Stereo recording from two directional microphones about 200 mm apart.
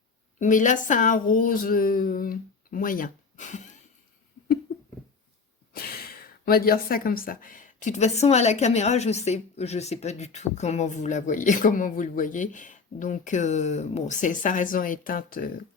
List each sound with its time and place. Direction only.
0.3 s speech: 40° left (ahead or behind)
4.7 s a sound: 50° left (ahead or behind)
5.7 s speech: 50° left (ahead or behind)